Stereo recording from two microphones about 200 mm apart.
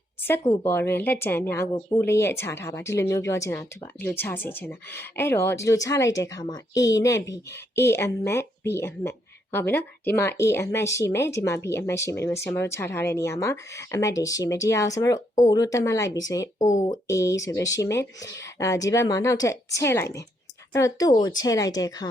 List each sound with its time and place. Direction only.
0.2 s a woman's voice: 10° left (ahead or behind)